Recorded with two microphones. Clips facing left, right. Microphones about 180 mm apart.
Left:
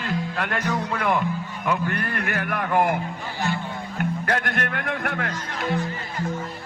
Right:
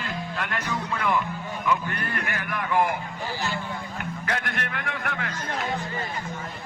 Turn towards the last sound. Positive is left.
turn(degrees=55)  # may be behind; listen again after turning